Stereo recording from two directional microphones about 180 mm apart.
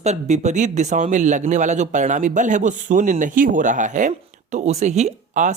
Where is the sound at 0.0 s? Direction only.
40° right (ahead or behind).